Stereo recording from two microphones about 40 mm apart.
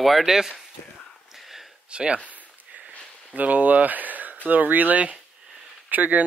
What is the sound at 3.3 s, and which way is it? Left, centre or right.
Speech, right.